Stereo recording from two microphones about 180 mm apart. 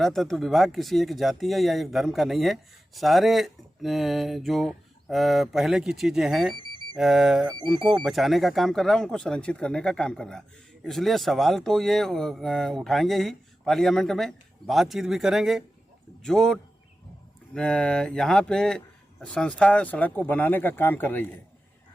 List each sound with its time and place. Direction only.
0.0 s speech: centre (ahead or behind)